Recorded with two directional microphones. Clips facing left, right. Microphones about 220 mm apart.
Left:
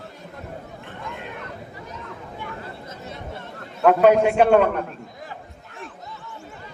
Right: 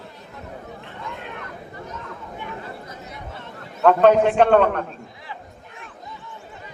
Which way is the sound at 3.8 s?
10° left (ahead or behind).